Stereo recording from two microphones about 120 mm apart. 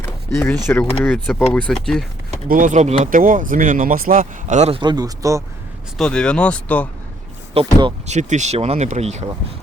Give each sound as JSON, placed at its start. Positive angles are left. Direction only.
{"t": 0.0, "sound": "a sound", "side_deg": 10}
{"t": 0.7, "sound": "speech", "side_deg": 20}
{"t": 2.6, "sound": "speech", "side_deg": -80}
{"t": 4.7, "sound": "a man's voice", "side_deg": -40}
{"t": 6.0, "sound": "speech", "side_deg": 5}
{"t": 7.5, "sound": "a man's voice", "side_deg": -40}
{"t": 8.0, "sound": "speech", "side_deg": -75}